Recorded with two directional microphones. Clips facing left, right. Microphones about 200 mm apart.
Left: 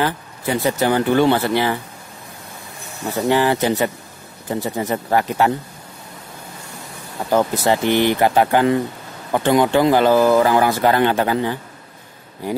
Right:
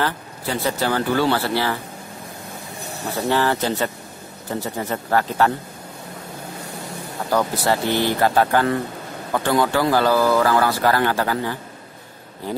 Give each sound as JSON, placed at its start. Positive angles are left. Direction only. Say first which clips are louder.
{"t": 0.0, "sound": "speech", "louder": "left 3 dB", "side_deg": 15}
{"t": 3.3, "sound": "speech", "louder": "left 4 dB", "side_deg": 15}
{"t": 7.2, "sound": "speech", "louder": "left 3 dB", "side_deg": 20}